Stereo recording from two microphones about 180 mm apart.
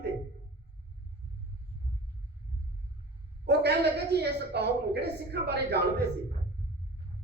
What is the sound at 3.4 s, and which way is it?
A woman's voice, 65° right (ahead or behind).